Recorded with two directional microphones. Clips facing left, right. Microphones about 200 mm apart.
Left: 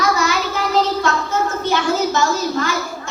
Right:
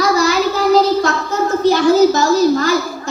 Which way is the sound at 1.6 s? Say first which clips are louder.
Right 12 dB; 35° right (ahead or behind).